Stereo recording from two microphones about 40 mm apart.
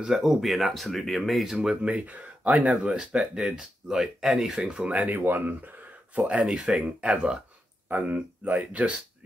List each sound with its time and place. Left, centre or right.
0.0 s speech: centre
1.6 s speech: right
3.3 s speech: centre
4.8 s speech: right
5.2 s speech: right
6.1 s speech: right
7.9 s speech: right